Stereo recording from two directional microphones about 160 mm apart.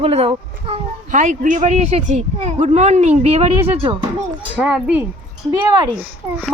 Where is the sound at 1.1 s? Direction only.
50° right (ahead or behind).